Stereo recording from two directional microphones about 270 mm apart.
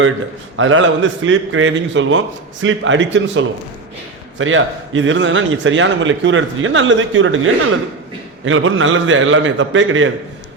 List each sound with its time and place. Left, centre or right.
0.5 s a man's voice: right